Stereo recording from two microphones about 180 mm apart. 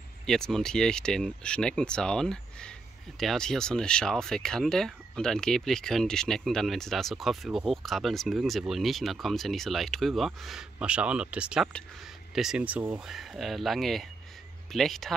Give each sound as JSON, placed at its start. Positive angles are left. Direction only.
{"t": 0.3, "sound": "speech", "side_deg": 5}